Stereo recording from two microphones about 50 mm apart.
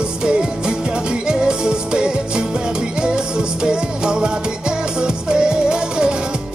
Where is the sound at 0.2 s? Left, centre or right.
Centre.